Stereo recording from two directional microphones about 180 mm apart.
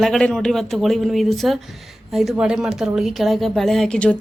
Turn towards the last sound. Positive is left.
turn(degrees=5)  # may be behind; listen again after turning